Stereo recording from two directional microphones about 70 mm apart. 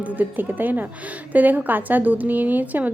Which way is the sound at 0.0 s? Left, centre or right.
Right.